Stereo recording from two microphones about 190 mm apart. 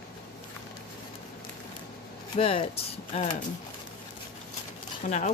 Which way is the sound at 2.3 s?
30° left (ahead or behind).